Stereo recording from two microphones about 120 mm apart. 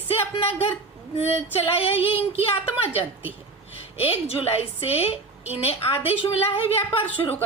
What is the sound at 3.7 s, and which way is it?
A woman's voice, 50° left (ahead or behind).